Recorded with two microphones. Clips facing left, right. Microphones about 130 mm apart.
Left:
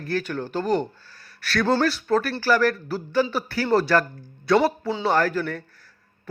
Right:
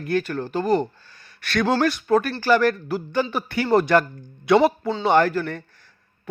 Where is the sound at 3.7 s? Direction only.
15° right (ahead or behind).